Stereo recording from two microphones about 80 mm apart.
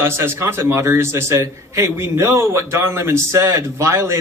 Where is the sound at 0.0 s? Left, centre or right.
Right.